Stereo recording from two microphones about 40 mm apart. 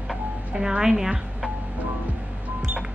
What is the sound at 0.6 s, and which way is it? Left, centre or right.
Speech, centre.